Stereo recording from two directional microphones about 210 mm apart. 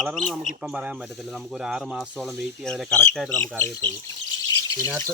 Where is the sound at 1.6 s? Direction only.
Centre (ahead or behind).